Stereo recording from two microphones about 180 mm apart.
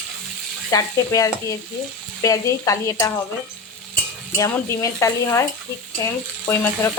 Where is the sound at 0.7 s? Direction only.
20° left (ahead or behind).